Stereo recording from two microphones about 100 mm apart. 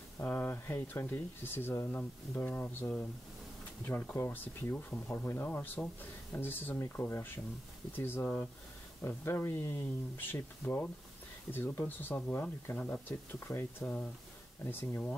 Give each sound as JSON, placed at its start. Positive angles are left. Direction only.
{"t": 0.2, "sound": "speech", "side_deg": 20}